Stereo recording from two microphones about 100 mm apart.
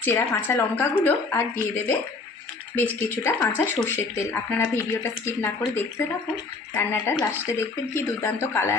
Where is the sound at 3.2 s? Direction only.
30° left (ahead or behind).